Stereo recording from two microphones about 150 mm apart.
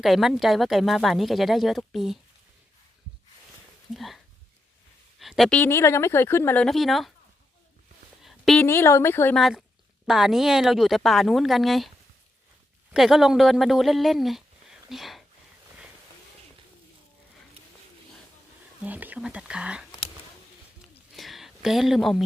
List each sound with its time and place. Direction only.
0.0 s speech: centre (ahead or behind)
3.9 s speech: centre (ahead or behind)
5.2 s speech: centre (ahead or behind)
6.7 s speech: centre (ahead or behind)
8.2 s a sound: centre (ahead or behind)
8.6 s speech: 15° left (ahead or behind)
9.3 s speech: centre (ahead or behind)
12.9 s speech: centre (ahead or behind)
18.8 s speech: 10° right (ahead or behind)
21.2 s a sound: centre (ahead or behind)